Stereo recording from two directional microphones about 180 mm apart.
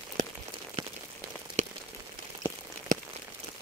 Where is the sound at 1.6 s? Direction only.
40° right (ahead or behind).